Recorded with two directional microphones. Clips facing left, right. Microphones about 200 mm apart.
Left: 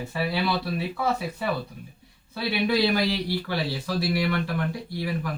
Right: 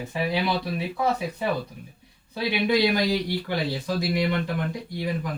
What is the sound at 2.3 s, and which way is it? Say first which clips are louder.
Speech: right 1 dB; 15° right (ahead or behind).